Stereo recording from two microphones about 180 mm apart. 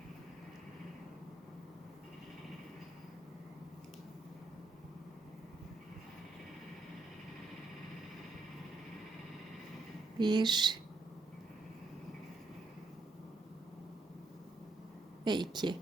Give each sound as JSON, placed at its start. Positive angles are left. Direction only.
{"t": 10.2, "sound": "speech", "side_deg": -25}
{"t": 15.2, "sound": "speech", "side_deg": -25}